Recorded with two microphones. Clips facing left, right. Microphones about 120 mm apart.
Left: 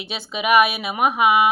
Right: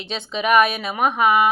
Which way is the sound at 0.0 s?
10° left (ahead or behind).